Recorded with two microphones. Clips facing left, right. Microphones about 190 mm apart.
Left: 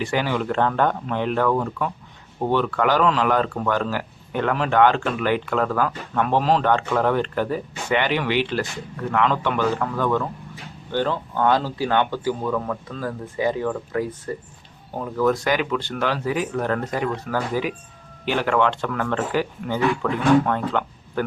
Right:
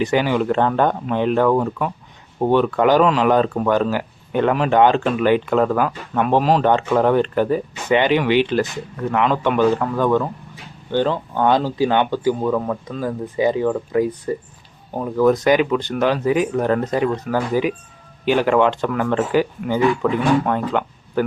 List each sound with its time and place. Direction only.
0.0 s speech: 20° right (ahead or behind)